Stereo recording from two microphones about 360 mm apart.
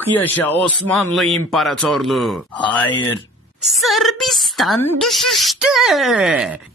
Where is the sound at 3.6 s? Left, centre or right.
Centre.